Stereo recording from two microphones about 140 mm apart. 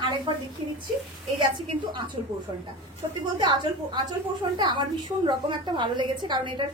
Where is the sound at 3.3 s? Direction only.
35° right (ahead or behind).